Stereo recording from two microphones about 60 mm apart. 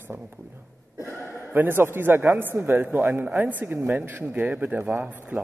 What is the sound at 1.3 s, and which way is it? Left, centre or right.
Speech, right.